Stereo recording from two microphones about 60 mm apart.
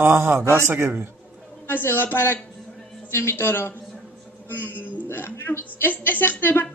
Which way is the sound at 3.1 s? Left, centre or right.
Left.